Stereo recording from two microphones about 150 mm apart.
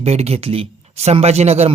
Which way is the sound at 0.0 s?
45° right (ahead or behind).